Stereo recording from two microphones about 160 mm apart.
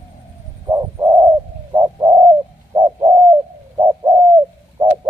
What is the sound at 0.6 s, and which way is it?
Bird, 25° right (ahead or behind).